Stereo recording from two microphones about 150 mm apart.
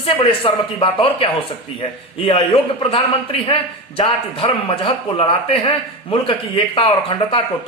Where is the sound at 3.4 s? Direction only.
40° left (ahead or behind).